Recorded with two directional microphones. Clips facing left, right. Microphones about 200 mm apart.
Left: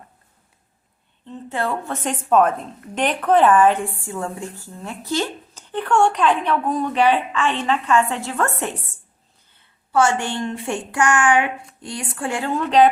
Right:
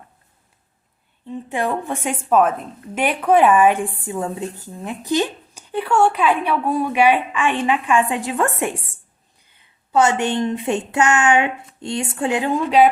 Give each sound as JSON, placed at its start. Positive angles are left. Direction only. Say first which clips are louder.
{"t": 1.3, "sound": "a woman's voice", "louder": "right 2 dB", "side_deg": -15}